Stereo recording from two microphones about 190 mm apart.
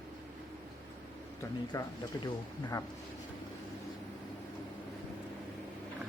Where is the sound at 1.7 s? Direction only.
20° left (ahead or behind).